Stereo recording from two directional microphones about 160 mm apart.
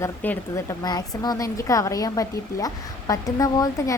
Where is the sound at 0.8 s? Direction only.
25° left (ahead or behind).